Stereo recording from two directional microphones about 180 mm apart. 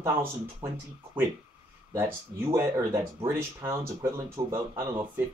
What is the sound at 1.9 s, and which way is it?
Speech, 15° right (ahead or behind).